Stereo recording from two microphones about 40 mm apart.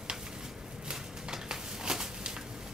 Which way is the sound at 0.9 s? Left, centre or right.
Centre.